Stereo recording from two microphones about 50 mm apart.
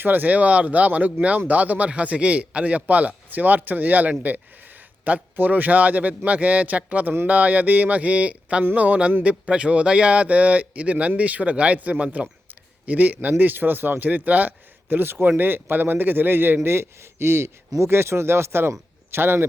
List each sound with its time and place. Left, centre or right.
0.0 s a man's voice: right
14.8 s a man's voice: right
16.6 s a man's voice: right